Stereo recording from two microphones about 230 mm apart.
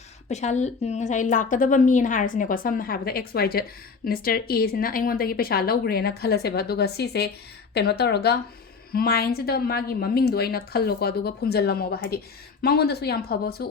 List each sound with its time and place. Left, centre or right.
0.3 s a woman's voice: left